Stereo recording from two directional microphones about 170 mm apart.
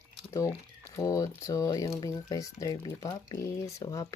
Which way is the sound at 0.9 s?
20° left (ahead or behind).